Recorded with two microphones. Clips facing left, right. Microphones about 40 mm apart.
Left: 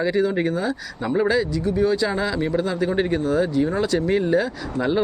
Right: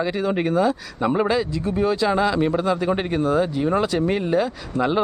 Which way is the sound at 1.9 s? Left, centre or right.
Centre.